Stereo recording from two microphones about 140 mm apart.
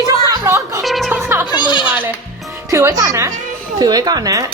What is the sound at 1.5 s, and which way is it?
Speech, 35° left (ahead or behind).